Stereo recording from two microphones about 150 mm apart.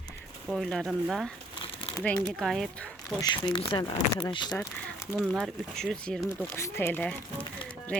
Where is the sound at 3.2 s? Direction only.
30° left (ahead or behind).